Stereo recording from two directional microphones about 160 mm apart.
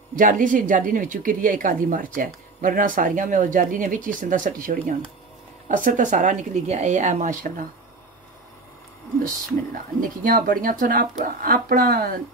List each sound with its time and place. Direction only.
0.1 s a woman's voice: 55° right (ahead or behind)
9.9 s a woman's voice: 60° right (ahead or behind)